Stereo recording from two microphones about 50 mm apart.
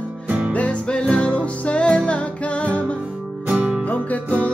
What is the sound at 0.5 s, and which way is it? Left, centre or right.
Music, left.